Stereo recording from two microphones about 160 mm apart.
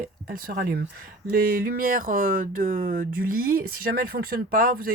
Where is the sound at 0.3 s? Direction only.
65° right (ahead or behind).